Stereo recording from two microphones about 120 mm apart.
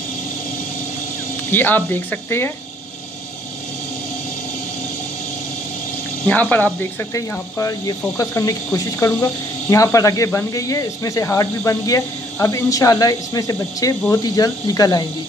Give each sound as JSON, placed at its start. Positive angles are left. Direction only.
{"t": 1.5, "sound": "speech", "side_deg": 15}
{"t": 6.2, "sound": "speech", "side_deg": 15}
{"t": 7.2, "sound": "speech", "side_deg": 25}